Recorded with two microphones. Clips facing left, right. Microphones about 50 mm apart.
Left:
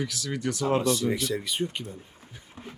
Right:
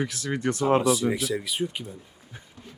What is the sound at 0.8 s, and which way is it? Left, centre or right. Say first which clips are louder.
Speech: right 2 dB; centre.